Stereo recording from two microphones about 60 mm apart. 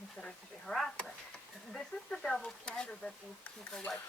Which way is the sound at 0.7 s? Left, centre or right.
Centre.